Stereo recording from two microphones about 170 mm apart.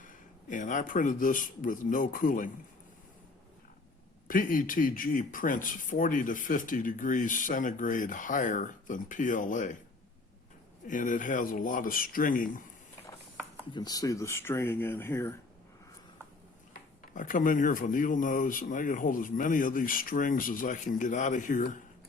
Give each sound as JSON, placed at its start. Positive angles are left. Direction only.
{"t": 0.0, "sound": "speech", "side_deg": 50}
{"t": 4.3, "sound": "speech", "side_deg": 55}
{"t": 10.8, "sound": "speech", "side_deg": 50}
{"t": 13.7, "sound": "speech", "side_deg": 20}
{"t": 17.2, "sound": "speech", "side_deg": 50}